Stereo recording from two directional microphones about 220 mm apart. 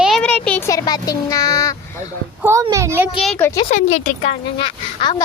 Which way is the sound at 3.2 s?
5° left (ahead or behind).